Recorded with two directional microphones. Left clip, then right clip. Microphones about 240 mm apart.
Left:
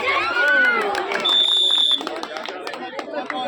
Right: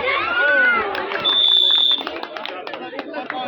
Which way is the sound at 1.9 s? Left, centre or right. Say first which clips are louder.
Right 1 dB; centre.